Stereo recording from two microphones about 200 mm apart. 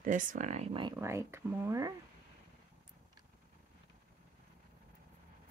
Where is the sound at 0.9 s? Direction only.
15° right (ahead or behind).